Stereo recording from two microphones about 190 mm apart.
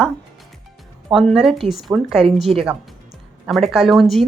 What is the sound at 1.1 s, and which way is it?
Speech, centre (ahead or behind).